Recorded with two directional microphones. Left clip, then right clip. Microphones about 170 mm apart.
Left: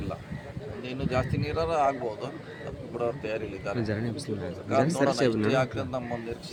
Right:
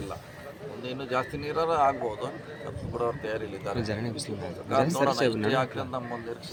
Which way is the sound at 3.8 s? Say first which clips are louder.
Even; 30° left (ahead or behind).